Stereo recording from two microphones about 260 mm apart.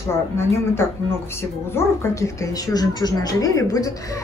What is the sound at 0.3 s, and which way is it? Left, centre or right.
Speech, centre.